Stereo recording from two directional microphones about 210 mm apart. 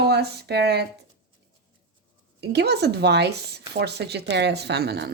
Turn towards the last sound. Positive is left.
turn(degrees=-50)  # may be behind; listen again after turning